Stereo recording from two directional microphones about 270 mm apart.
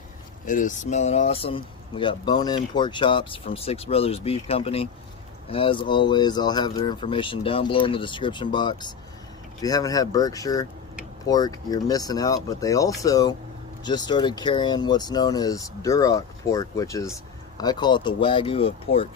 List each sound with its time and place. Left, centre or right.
0.4 s speech: left